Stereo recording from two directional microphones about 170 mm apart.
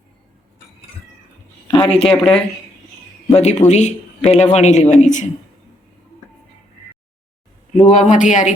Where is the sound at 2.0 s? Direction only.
30° left (ahead or behind).